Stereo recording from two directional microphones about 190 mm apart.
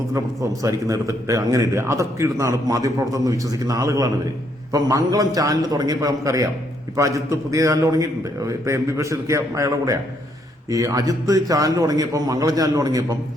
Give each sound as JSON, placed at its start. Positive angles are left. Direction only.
{"t": 0.6, "sound": "a man's voice", "side_deg": -15}